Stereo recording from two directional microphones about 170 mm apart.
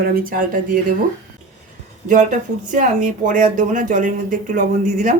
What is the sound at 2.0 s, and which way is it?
Speech, 45° right (ahead or behind).